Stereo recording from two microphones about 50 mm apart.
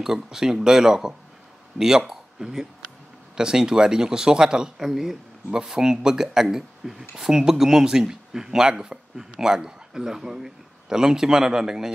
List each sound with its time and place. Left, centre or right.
0.0 s speech: centre